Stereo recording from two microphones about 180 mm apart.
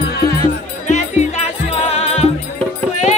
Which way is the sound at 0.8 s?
40° left (ahead or behind).